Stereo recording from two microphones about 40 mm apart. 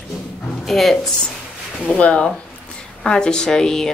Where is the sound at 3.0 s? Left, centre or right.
Centre.